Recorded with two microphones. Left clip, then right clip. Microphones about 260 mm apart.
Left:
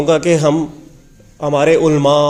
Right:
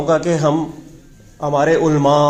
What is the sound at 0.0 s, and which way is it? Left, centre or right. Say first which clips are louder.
Speech: left 3 dB; left.